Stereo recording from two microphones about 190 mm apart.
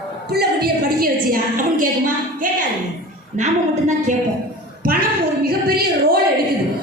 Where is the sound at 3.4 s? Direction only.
40° right (ahead or behind).